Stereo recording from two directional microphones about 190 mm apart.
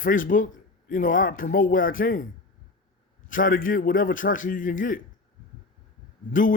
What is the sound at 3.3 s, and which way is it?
A man's voice, 45° left (ahead or behind).